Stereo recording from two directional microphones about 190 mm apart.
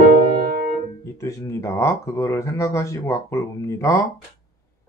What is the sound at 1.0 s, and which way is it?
Speech, 15° left (ahead or behind).